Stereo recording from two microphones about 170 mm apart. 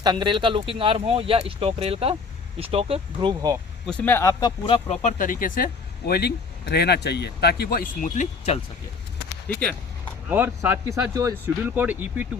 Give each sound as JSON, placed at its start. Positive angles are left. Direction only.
{"t": 0.0, "sound": "speech", "side_deg": -25}
{"t": 3.8, "sound": "speech", "side_deg": 10}
{"t": 5.0, "sound": "speech", "side_deg": 50}
{"t": 9.5, "sound": "speech", "side_deg": 5}
{"t": 10.2, "sound": "speech", "side_deg": -10}